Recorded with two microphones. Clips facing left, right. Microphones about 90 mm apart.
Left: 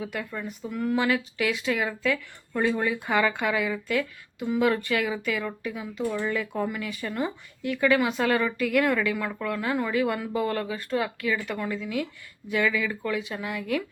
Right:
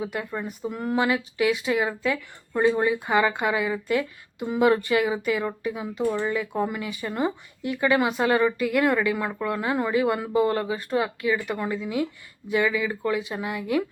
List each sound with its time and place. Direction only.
0.0 s speech: 25° right (ahead or behind)
0.9 s speech: 15° right (ahead or behind)
6.1 s speech: 15° right (ahead or behind)